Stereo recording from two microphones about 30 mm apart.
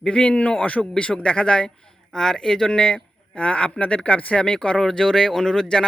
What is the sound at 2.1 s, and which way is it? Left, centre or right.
Speech, centre.